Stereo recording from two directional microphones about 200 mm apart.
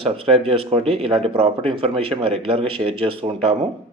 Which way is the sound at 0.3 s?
30° right (ahead or behind).